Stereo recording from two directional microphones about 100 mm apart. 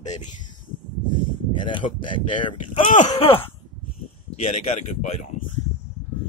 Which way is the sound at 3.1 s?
65° left (ahead or behind).